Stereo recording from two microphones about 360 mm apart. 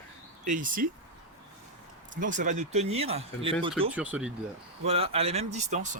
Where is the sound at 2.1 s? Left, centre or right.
Right.